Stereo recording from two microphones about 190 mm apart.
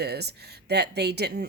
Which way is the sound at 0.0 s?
60° right (ahead or behind).